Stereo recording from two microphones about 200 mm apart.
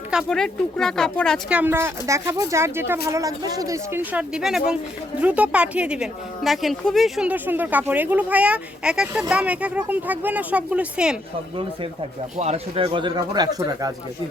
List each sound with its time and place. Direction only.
0.1 s speech: centre (ahead or behind)
1.5 s a woman's voice: 10° right (ahead or behind)
12.4 s speech: 30° right (ahead or behind)